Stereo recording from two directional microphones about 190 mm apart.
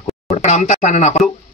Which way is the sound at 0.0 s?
35° left (ahead or behind).